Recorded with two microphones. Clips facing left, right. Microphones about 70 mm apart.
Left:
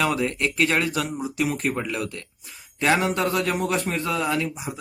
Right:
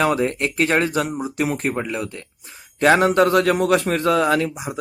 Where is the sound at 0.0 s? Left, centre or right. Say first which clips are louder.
Right 4 dB; right.